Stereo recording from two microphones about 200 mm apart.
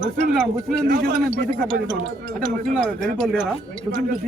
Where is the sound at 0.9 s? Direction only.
45° right (ahead or behind).